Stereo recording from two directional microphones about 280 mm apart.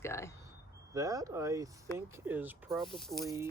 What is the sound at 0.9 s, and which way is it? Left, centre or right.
Speech, centre.